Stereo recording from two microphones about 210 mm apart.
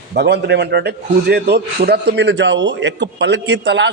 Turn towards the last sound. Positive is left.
turn(degrees=-60)  # may be behind; listen again after turning